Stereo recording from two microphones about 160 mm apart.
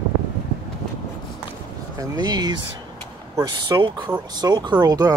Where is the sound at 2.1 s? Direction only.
25° right (ahead or behind).